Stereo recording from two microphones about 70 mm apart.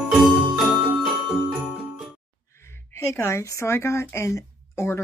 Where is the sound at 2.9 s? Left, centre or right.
Left.